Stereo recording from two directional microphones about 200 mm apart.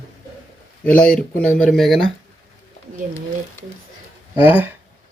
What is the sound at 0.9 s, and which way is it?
Speech, 5° left (ahead or behind).